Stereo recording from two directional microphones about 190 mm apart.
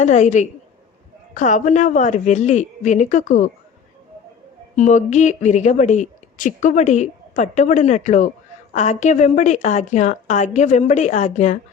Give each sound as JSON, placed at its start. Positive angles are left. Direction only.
{"t": 0.0, "sound": "speech", "side_deg": 40}
{"t": 4.8, "sound": "speech", "side_deg": 40}